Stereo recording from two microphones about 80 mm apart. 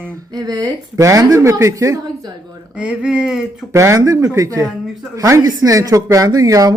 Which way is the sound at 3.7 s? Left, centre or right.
Right.